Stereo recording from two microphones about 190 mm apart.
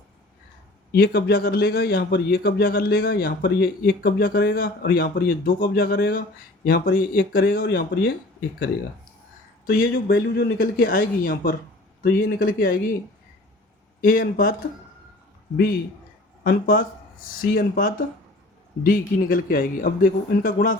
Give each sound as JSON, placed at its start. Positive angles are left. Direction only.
{"t": 0.9, "sound": "a man's voice", "side_deg": 55}
{"t": 9.6, "sound": "a man's voice", "side_deg": 45}
{"t": 9.9, "sound": "a man's voice", "side_deg": 60}
{"t": 14.0, "sound": "a man's voice", "side_deg": 50}
{"t": 16.4, "sound": "a man's voice", "side_deg": 50}